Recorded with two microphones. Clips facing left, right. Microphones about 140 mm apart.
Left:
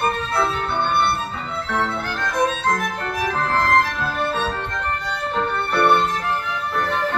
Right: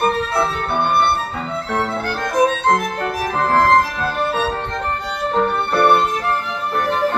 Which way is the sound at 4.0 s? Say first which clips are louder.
Right 3 dB; 10° right (ahead or behind).